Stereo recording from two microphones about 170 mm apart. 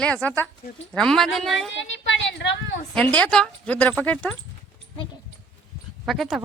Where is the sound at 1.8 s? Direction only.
90° left.